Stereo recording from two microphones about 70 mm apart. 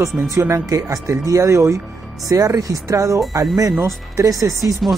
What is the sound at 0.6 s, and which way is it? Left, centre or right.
Speech, right.